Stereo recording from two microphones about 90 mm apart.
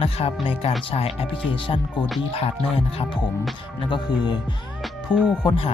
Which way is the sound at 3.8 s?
60° left (ahead or behind).